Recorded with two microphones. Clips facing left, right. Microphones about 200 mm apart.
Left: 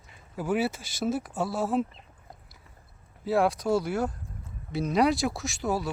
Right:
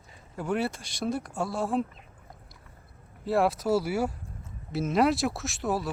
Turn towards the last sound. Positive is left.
turn(degrees=0)  # may be behind; listen again after turning